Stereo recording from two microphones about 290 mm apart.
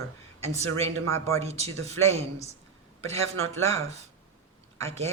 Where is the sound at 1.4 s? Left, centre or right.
Right.